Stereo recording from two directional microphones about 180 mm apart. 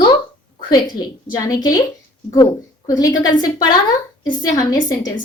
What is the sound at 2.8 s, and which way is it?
A woman's voice, 20° left (ahead or behind).